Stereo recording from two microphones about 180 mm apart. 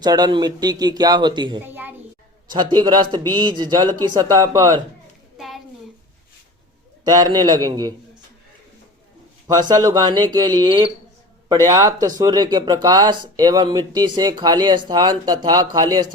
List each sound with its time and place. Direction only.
0.0 s speech: 20° right (ahead or behind)
1.6 s a woman's voice: 10° right (ahead or behind)
2.5 s speech: 25° right (ahead or behind)
7.0 s speech: 20° right (ahead or behind)
9.5 s speech: 20° right (ahead or behind)